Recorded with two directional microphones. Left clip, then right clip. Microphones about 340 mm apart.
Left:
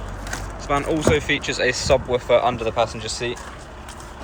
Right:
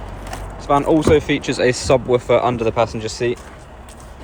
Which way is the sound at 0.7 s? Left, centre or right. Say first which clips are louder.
Right 6 dB; centre.